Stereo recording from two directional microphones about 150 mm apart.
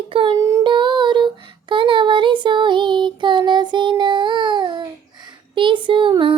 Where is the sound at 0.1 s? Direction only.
35° right (ahead or behind).